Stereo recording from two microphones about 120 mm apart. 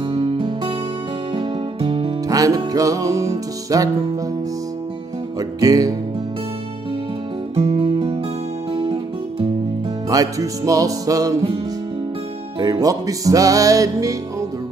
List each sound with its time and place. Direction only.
0.1 s music: 45° right (ahead or behind)
2.2 s music: 30° right (ahead or behind)
5.4 s music: 30° right (ahead or behind)
7.5 s music: 45° right (ahead or behind)
10.0 s music: 30° right (ahead or behind)
12.5 s music: 30° right (ahead or behind)